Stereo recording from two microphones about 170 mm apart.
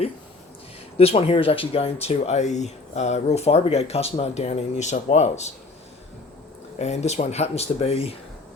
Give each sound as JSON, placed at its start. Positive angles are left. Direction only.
{"t": 0.9, "sound": "speech", "side_deg": 35}
{"t": 6.7, "sound": "speech", "side_deg": 40}